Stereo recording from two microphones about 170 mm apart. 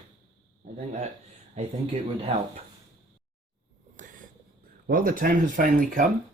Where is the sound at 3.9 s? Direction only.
50° right (ahead or behind).